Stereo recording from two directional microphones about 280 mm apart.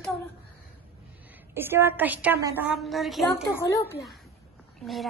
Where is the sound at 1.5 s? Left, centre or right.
Centre.